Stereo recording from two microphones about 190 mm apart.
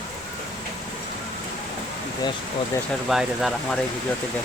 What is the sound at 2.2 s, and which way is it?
Speech, 20° left (ahead or behind).